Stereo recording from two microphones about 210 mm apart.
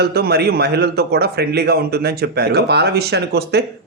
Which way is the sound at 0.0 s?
50° right (ahead or behind).